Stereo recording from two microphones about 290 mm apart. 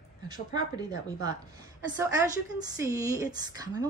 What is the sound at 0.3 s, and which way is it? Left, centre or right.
Speech, centre.